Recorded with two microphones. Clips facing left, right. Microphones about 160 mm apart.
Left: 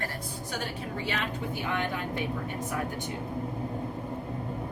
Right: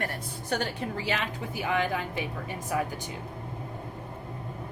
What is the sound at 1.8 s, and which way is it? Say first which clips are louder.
Speech: right 2 dB; 90° right.